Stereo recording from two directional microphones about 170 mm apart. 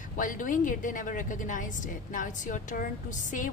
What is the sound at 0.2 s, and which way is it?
A woman's voice, 50° left (ahead or behind).